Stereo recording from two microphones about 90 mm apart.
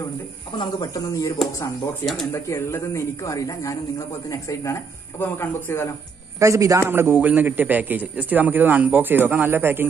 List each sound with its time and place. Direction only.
0.6 s speech: 45° left (ahead or behind)
5.2 s speech: 25° left (ahead or behind)
6.4 s a man's voice: 35° right (ahead or behind)
6.8 s a man's voice: 25° right (ahead or behind)